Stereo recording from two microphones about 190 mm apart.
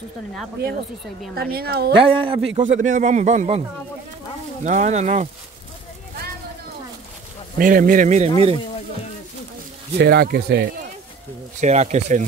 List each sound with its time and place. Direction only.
1.3 s speech: 55° right (ahead or behind)
2.0 s a man's voice: 25° right (ahead or behind)
4.6 s a man's voice: 40° right (ahead or behind)
7.5 s speech: 45° right (ahead or behind)
9.9 s speech: 60° right (ahead or behind)
11.6 s a man's voice: 35° right (ahead or behind)